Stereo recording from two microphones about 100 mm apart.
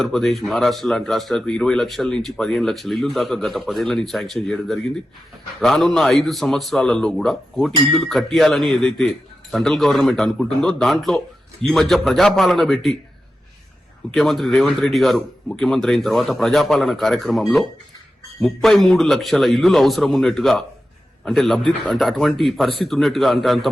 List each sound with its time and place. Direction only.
0.0 s a man's voice: 5° left (ahead or behind)
14.1 s a man's voice: centre (ahead or behind)
18.4 s a man's voice: 5° left (ahead or behind)